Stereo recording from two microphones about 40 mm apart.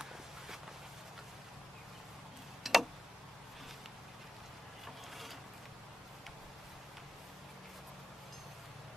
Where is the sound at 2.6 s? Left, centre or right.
Centre.